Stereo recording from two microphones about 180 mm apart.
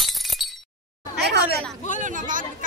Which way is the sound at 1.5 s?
45° left (ahead or behind).